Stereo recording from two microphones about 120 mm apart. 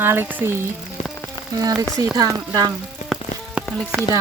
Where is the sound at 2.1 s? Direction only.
30° right (ahead or behind).